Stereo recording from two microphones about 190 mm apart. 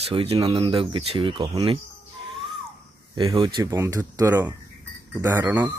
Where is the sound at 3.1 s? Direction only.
30° right (ahead or behind).